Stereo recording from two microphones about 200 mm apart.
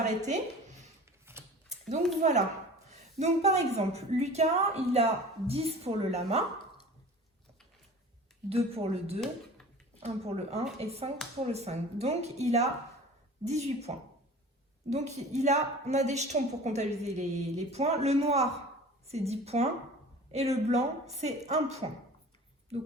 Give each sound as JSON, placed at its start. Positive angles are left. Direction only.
{"t": 0.0, "sound": "a woman's voice", "side_deg": -40}
{"t": 1.2, "sound": "mechanisms", "side_deg": -10}
{"t": 2.2, "sound": "a woman's voice", "side_deg": -35}
{"t": 8.4, "sound": "a woman's voice", "side_deg": -30}